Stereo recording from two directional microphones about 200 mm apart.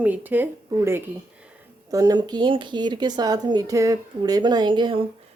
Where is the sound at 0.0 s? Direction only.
10° right (ahead or behind).